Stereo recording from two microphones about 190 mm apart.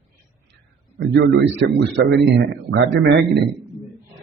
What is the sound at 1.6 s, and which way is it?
A man's voice, 60° right (ahead or behind).